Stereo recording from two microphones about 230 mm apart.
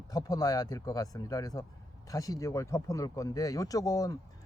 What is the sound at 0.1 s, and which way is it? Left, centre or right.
Speech, centre.